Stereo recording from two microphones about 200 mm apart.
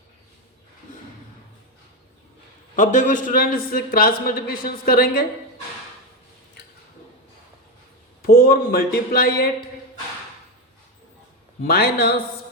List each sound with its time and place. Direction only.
2.7 s a man's voice: 40° left (ahead or behind)
8.2 s a man's voice: 50° left (ahead or behind)
11.6 s a man's voice: 50° left (ahead or behind)